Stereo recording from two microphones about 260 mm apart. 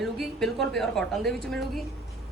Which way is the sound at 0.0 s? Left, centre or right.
Centre.